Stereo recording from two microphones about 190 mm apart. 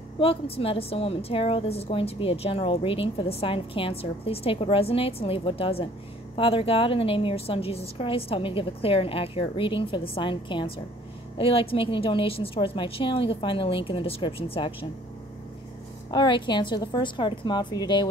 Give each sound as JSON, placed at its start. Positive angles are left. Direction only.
{"t": 0.2, "sound": "a woman's voice", "side_deg": 30}
{"t": 16.1, "sound": "a woman's voice", "side_deg": 25}